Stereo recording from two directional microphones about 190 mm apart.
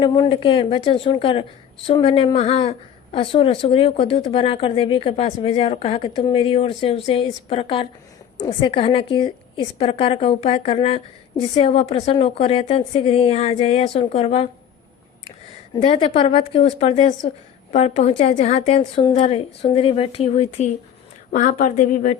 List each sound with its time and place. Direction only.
0.0 s a woman's voice: 25° left (ahead or behind)
15.7 s speech: 30° left (ahead or behind)